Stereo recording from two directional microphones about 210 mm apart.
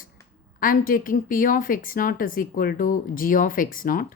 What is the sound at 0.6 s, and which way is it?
Speech, 40° left (ahead or behind).